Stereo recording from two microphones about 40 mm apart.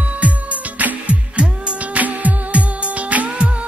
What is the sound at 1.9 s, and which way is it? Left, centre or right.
Music, right.